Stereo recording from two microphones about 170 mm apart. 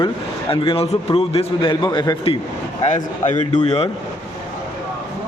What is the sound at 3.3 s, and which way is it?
Speech, 45° left (ahead or behind).